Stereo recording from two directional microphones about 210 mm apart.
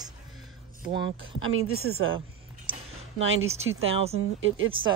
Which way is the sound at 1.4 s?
75° right (ahead or behind).